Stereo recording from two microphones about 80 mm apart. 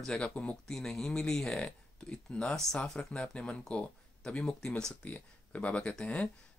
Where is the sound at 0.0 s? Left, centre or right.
Centre.